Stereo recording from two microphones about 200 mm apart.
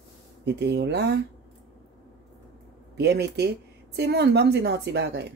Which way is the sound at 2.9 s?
55° right (ahead or behind).